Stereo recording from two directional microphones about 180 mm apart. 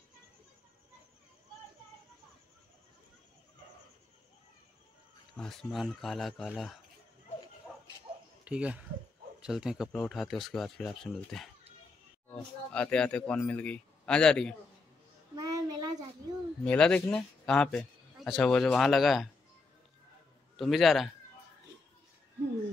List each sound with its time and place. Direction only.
5.4 s a man's voice: centre (ahead or behind)
8.5 s a man's voice: 5° right (ahead or behind)
15.3 s a sound: 20° right (ahead or behind)
16.6 s a man's voice: 5° left (ahead or behind)
20.5 s a man's voice: centre (ahead or behind)